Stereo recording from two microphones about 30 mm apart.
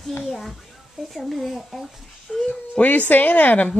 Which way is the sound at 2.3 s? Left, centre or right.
Left.